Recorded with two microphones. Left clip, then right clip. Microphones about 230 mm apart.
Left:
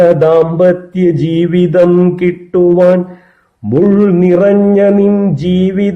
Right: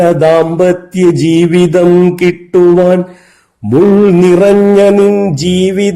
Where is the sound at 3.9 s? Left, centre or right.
Right.